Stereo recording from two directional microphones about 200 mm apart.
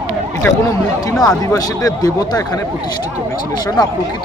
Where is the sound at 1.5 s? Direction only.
20° left (ahead or behind).